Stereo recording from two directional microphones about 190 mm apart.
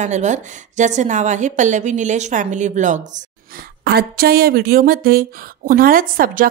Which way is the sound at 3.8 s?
55° right (ahead or behind).